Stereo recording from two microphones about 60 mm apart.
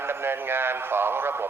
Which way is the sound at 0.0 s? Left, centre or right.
Right.